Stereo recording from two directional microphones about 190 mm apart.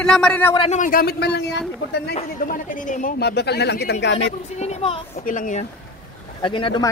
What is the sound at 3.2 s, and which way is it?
Speech, 60° left (ahead or behind).